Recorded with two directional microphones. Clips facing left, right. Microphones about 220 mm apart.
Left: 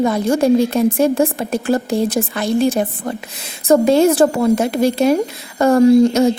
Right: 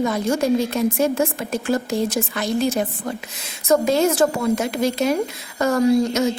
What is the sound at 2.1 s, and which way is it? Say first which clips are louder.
Speech: left 4 dB; 30° left (ahead or behind).